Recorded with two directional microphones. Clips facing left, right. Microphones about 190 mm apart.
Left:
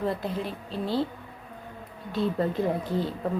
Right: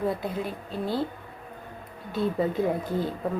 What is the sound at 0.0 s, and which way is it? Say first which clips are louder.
Speech: right 1 dB; centre (ahead or behind).